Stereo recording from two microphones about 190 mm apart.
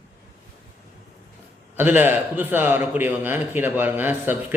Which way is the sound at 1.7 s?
10° right (ahead or behind).